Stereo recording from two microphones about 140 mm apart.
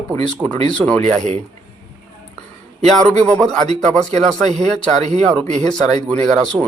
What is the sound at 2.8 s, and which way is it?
A man's voice, 5° left (ahead or behind).